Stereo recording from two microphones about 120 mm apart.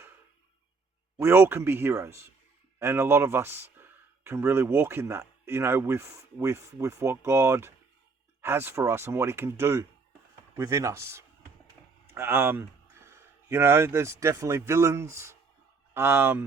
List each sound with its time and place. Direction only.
1.2 s speech: 20° right (ahead or behind)